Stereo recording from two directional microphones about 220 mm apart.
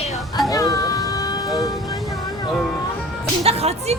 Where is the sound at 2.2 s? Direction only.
15° left (ahead or behind).